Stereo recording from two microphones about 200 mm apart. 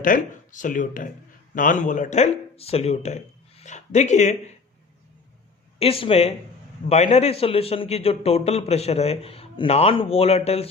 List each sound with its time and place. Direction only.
0.0 s speech: 40° left (ahead or behind)
5.8 s a man's voice: 30° left (ahead or behind)